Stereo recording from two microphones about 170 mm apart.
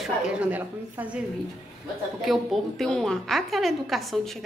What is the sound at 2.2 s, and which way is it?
Speech, centre (ahead or behind).